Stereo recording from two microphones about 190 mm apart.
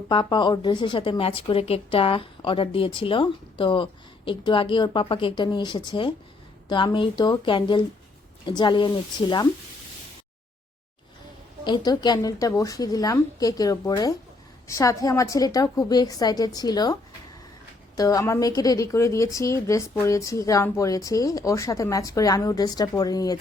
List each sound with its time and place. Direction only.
0.1 s a woman's voice: 25° left (ahead or behind)
11.6 s a woman's voice: 20° left (ahead or behind)